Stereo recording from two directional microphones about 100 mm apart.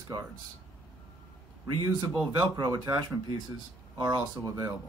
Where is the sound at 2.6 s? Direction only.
40° right (ahead or behind).